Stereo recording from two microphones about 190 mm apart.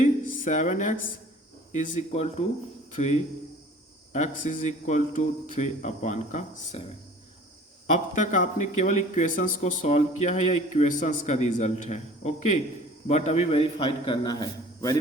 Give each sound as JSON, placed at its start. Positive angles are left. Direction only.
{"t": 0.4, "sound": "speech", "side_deg": 40}
{"t": 4.1, "sound": "speech", "side_deg": 40}
{"t": 7.9, "sound": "a man's voice", "side_deg": 40}